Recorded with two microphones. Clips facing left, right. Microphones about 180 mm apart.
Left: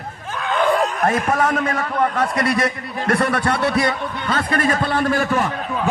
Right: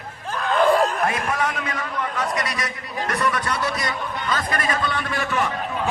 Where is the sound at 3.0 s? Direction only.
30° left (ahead or behind).